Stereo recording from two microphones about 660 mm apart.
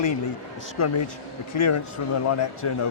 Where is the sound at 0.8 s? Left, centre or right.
Left.